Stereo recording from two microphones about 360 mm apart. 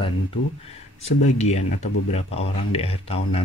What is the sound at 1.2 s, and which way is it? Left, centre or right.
Speech, centre.